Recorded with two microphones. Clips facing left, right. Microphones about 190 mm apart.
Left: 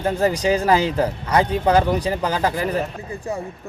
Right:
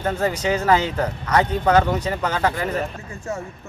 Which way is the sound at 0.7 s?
35° left (ahead or behind).